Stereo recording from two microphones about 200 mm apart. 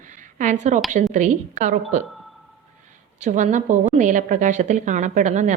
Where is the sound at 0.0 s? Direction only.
40° right (ahead or behind).